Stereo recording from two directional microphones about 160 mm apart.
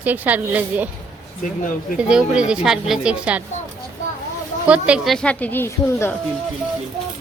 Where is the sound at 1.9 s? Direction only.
5° right (ahead or behind).